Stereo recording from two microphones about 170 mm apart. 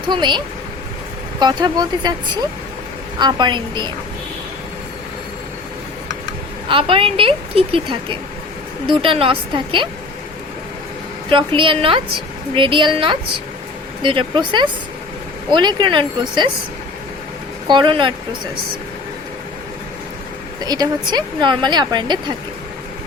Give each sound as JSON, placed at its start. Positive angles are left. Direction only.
{"t": 0.1, "sound": "speech", "side_deg": -25}
{"t": 6.7, "sound": "speech", "side_deg": -30}
{"t": 11.3, "sound": "speech", "side_deg": -30}
{"t": 17.7, "sound": "speech", "side_deg": -30}
{"t": 20.7, "sound": "speech", "side_deg": -25}